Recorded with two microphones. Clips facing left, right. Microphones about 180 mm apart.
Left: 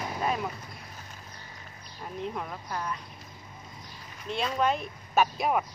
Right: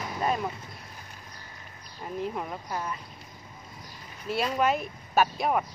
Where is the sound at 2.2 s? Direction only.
5° right (ahead or behind).